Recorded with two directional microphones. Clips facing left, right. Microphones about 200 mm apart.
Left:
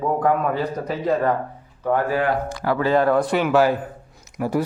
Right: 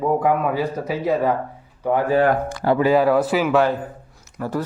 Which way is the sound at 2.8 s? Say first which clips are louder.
Right 1 dB; 10° right (ahead or behind).